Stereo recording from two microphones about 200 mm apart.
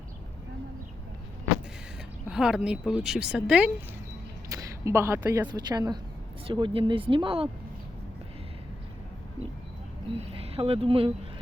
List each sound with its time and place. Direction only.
2.3 s speech: 5° right (ahead or behind)
4.4 s speech: 15° right (ahead or behind)
10.2 s speech: 30° right (ahead or behind)